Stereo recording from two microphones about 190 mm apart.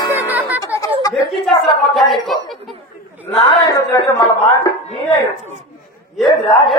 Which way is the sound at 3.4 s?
20° left (ahead or behind).